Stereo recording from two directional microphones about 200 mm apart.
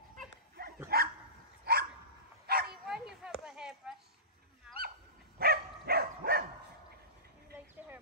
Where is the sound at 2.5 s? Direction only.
50° right (ahead or behind).